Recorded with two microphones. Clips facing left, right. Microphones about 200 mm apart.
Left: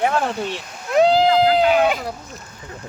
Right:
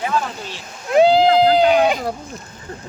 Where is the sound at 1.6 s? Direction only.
5° left (ahead or behind).